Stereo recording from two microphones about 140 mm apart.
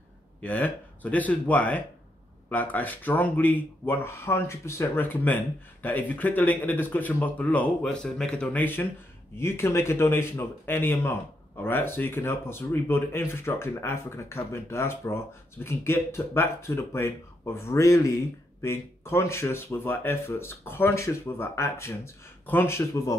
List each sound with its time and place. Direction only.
0.4 s speech: 10° left (ahead or behind)